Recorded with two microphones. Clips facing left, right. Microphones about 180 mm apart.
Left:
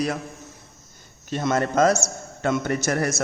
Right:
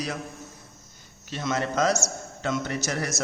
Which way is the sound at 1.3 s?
50° left (ahead or behind).